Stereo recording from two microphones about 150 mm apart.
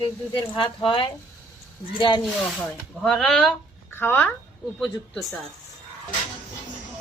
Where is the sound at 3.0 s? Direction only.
5° left (ahead or behind).